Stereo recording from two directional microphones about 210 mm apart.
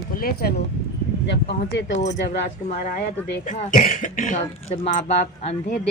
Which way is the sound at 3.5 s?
35° left (ahead or behind).